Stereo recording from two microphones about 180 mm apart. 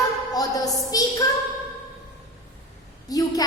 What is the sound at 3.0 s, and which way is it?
Speech, 20° left (ahead or behind).